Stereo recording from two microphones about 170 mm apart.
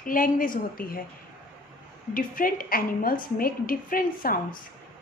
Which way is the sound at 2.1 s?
55° left (ahead or behind).